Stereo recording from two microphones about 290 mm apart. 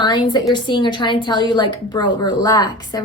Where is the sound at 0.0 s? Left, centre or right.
Centre.